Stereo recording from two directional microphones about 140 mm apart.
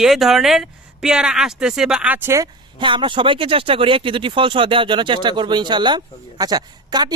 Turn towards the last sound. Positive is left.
turn(degrees=-30)  # may be behind; listen again after turning